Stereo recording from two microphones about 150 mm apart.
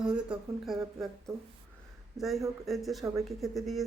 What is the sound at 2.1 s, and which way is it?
Speech, centre (ahead or behind).